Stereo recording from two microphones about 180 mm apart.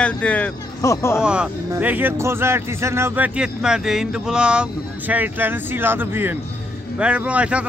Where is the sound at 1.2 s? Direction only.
5° right (ahead or behind).